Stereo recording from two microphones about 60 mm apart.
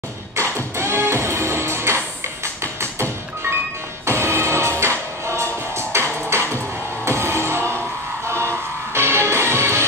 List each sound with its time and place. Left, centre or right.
0.4 s music: right